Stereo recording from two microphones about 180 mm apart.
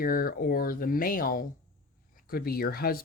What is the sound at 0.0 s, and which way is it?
Speech, 50° left (ahead or behind).